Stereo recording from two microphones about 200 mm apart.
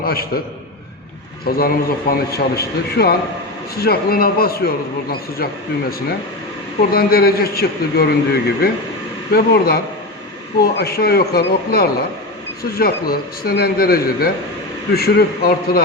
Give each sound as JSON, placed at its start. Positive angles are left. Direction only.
{"t": 0.0, "sound": "a man's voice", "side_deg": 50}
{"t": 1.5, "sound": "a man's voice", "side_deg": 45}
{"t": 6.9, "sound": "a man's voice", "side_deg": 50}